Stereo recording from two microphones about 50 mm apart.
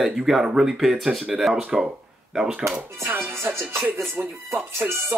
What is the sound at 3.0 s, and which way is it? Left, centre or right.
Speech, right.